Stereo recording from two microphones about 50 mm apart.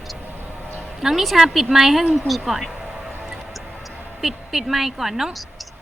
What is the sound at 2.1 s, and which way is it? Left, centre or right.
Music, centre.